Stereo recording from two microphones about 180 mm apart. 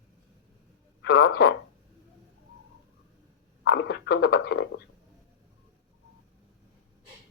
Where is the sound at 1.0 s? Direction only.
65° left (ahead or behind).